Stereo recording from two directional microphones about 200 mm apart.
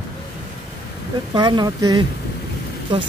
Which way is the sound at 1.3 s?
20° right (ahead or behind).